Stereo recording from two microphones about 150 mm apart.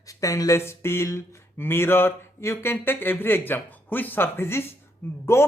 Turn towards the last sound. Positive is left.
turn(degrees=15)  # may be behind; listen again after turning